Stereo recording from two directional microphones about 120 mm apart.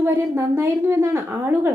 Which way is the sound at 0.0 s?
20° right (ahead or behind).